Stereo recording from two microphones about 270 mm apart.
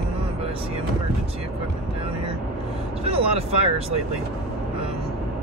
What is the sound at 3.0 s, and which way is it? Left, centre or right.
Speech, right.